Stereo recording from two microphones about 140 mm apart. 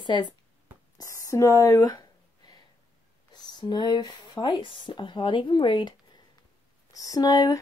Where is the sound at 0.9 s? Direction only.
20° left (ahead or behind).